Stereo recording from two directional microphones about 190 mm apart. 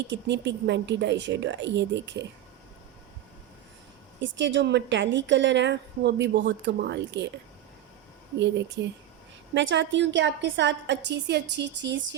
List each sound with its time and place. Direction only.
0.1 s a woman's voice: 65° right (ahead or behind)
4.2 s a woman's voice: 70° right (ahead or behind)
8.4 s a woman's voice: 65° right (ahead or behind)